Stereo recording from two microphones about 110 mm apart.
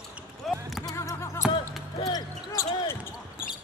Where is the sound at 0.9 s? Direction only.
25° left (ahead or behind).